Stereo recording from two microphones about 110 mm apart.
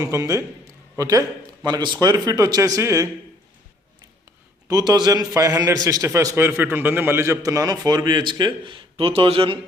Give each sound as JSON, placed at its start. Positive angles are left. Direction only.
{"t": 0.0, "sound": "a man's voice", "side_deg": -30}
{"t": 1.6, "sound": "a man's voice", "side_deg": -40}
{"t": 4.7, "sound": "a man's voice", "side_deg": -40}